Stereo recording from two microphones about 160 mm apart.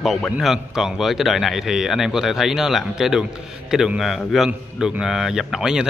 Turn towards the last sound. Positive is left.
turn(degrees=-5)  # may be behind; listen again after turning